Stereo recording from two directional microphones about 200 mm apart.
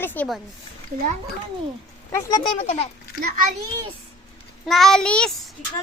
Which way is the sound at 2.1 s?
15° left (ahead or behind).